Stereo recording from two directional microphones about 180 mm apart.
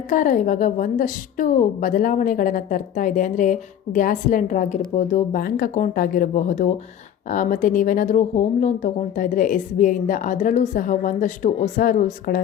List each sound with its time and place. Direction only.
0.1 s speech: 45° left (ahead or behind)